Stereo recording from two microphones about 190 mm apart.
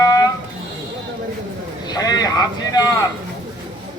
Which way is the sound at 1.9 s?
20° left (ahead or behind).